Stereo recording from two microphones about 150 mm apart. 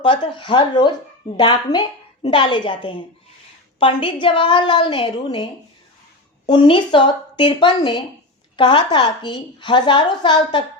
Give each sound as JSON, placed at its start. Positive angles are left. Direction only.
{"t": 0.0, "sound": "a woman's voice", "side_deg": 35}
{"t": 6.5, "sound": "a woman's voice", "side_deg": 30}